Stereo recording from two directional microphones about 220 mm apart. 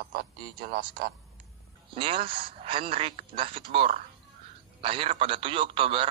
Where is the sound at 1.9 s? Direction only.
25° right (ahead or behind).